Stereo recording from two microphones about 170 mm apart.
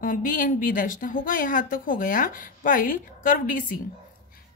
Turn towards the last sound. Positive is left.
turn(degrees=55)  # may be behind; listen again after turning